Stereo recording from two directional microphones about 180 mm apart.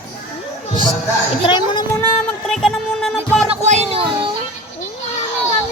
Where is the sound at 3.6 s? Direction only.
40° right (ahead or behind).